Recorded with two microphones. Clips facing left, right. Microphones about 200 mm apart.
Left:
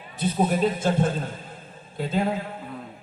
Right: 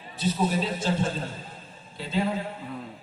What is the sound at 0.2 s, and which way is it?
A man's voice, 50° left (ahead or behind).